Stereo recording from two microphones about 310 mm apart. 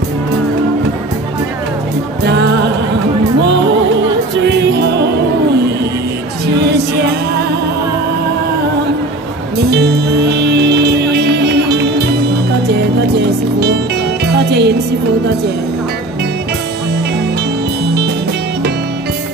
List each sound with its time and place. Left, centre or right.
4.4 s music: right
6.4 s music: right
9.7 s music: right
14.2 s music: right